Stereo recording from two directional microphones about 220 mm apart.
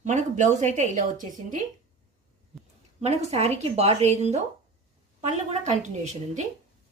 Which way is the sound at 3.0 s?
30° right (ahead or behind).